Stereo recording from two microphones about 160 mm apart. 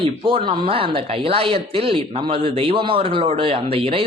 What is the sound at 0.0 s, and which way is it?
Speech, 35° right (ahead or behind).